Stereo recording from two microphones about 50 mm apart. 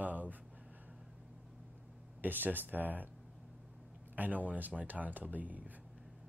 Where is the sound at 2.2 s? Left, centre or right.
Right.